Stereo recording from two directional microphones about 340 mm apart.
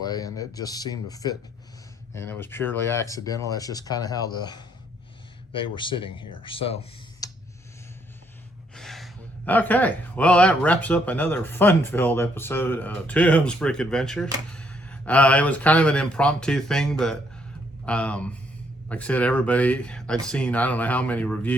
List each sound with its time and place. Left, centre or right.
0.0 s speech: centre
8.7 s speech: centre